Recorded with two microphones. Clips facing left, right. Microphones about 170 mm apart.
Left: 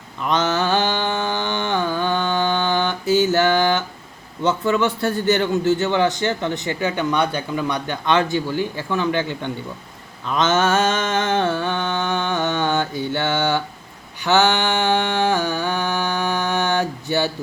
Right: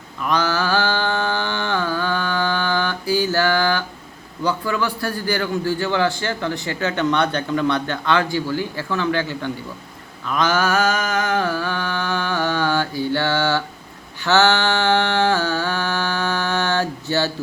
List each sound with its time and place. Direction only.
0.2 s mantra: 20° left (ahead or behind)
4.4 s a man's voice: 25° left (ahead or behind)
10.2 s mantra: 20° left (ahead or behind)
14.2 s a sound: 15° left (ahead or behind)